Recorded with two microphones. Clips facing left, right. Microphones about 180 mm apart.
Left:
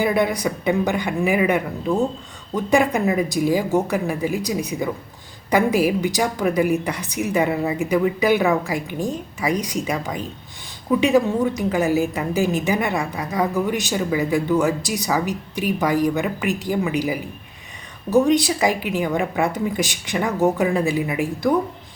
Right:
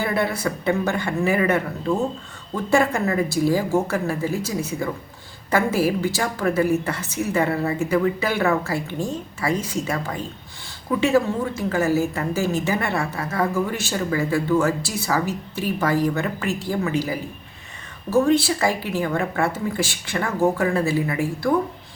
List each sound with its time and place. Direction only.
0.0 s a woman's voice: 15° left (ahead or behind)